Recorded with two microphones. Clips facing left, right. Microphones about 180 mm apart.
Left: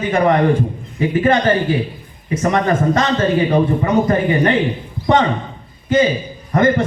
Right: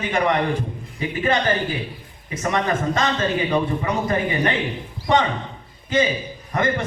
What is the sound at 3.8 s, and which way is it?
A man's voice, 40° left (ahead or behind).